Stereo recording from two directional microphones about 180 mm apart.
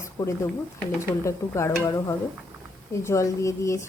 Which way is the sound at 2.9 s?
15° left (ahead or behind).